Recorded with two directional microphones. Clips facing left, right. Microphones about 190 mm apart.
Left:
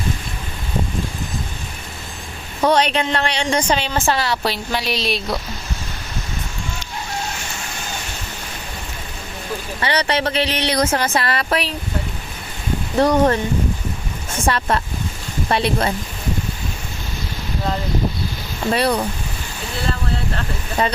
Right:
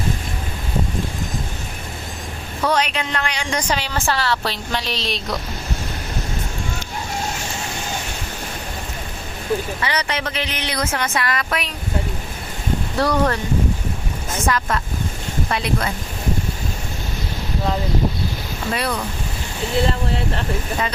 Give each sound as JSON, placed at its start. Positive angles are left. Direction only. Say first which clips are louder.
{"t": 2.6, "sound": "a woman's voice", "louder": "left 4 dB", "side_deg": 30}
{"t": 9.8, "sound": "speech", "louder": "left 4 dB", "side_deg": 30}
{"t": 13.0, "sound": "a woman's voice", "louder": "left 5 dB", "side_deg": 20}
{"t": 14.4, "sound": "speech", "louder": "left 3 dB", "side_deg": 30}
{"t": 18.7, "sound": "speech", "louder": "left 6 dB", "side_deg": 35}
{"t": 20.8, "sound": "speech", "louder": "left 8 dB", "side_deg": 35}